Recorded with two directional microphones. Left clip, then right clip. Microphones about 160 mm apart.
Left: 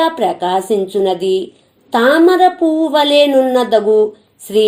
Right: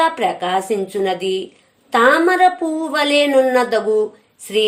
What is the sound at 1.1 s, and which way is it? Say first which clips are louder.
Speech: left 5 dB; 35° right (ahead or behind).